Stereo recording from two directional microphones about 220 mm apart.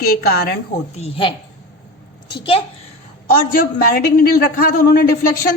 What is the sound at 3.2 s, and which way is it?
A man's voice, 40° left (ahead or behind).